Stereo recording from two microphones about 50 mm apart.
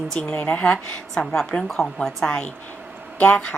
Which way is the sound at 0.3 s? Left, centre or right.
Left.